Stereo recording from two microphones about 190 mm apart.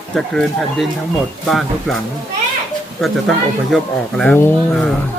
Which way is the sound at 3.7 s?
Centre (ahead or behind).